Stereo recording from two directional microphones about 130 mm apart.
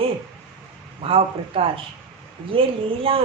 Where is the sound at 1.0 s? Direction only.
45° right (ahead or behind).